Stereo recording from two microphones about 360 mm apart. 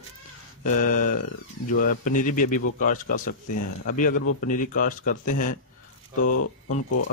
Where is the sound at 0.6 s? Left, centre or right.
Left.